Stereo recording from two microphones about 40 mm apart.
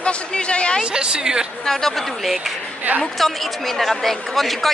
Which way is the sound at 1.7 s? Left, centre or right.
Centre.